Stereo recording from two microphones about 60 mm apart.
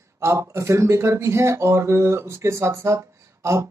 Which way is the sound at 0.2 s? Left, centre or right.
Right.